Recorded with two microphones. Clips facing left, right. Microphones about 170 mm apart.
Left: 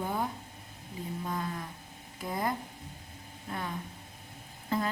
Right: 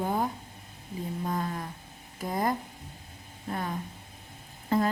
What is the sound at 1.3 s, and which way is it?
A woman's voice, 45° right (ahead or behind).